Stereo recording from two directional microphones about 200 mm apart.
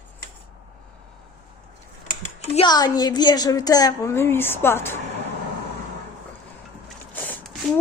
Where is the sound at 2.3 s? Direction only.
30° left (ahead or behind).